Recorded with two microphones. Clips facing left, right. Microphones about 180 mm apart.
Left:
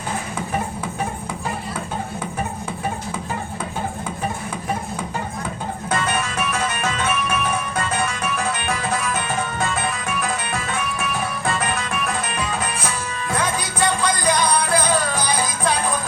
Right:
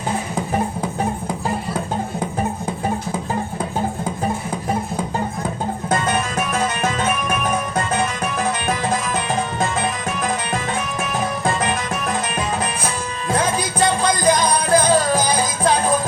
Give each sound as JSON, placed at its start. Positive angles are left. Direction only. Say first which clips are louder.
{"t": 13.3, "sound": "music", "louder": "right 4 dB", "side_deg": -45}